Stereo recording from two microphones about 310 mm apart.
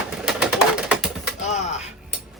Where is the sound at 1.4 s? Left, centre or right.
Left.